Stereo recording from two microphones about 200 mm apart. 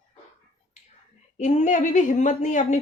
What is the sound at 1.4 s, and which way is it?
A woman's voice, 35° left (ahead or behind).